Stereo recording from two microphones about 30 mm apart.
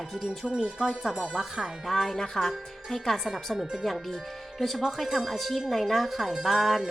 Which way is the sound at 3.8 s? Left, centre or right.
Centre.